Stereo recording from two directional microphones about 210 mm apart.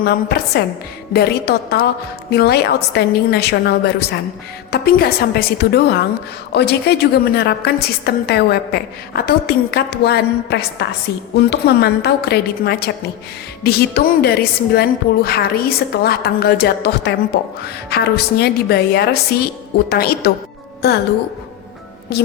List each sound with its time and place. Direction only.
0.0 s a woman's voice: 50° left (ahead or behind)
22.1 s a woman's voice: 50° left (ahead or behind)